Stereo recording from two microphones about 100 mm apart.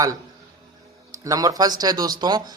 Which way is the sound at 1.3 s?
35° right (ahead or behind).